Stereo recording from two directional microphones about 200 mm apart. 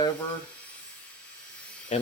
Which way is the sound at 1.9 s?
30° left (ahead or behind).